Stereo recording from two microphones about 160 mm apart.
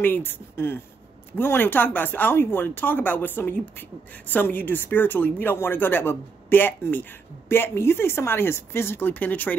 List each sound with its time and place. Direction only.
0.0 s speech: 10° left (ahead or behind)